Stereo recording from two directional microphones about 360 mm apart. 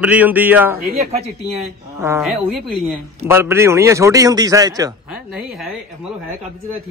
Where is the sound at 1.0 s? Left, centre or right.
Centre.